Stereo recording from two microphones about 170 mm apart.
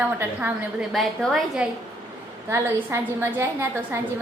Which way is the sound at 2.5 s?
15° right (ahead or behind).